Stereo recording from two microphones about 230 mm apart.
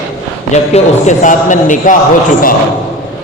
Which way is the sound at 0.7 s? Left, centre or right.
Left.